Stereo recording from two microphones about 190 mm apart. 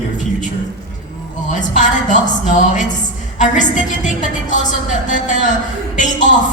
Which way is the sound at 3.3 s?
40° left (ahead or behind).